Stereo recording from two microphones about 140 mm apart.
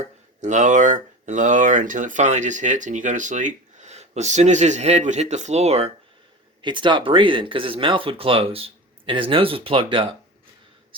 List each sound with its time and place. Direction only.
0.4 s speech: 60° right (ahead or behind)
6.6 s speech: 35° right (ahead or behind)